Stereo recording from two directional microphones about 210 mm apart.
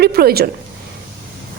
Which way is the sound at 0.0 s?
45° right (ahead or behind).